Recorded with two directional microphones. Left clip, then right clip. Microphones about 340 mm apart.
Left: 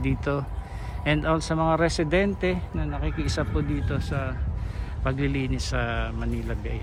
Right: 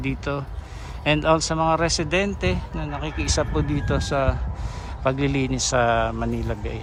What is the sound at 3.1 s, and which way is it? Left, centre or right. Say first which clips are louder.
Speech: right 7 dB; centre.